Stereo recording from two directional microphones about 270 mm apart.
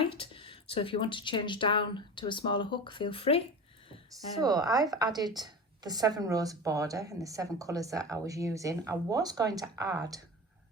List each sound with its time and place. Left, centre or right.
0.1 s speech: centre
4.4 s speech: centre